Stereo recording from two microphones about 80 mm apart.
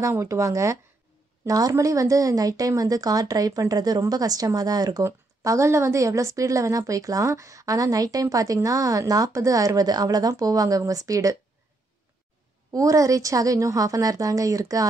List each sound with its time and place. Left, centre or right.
0.0 s a woman's voice: right
5.0 s a woman's voice: right
12.7 s a woman's voice: right